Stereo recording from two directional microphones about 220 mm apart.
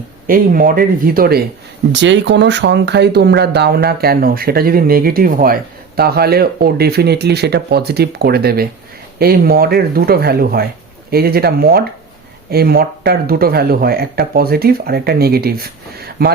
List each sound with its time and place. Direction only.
0.3 s speech: 40° right (ahead or behind)
1.9 s speech: 55° right (ahead or behind)